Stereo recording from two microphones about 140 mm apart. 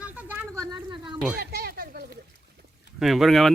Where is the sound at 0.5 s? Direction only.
30° right (ahead or behind).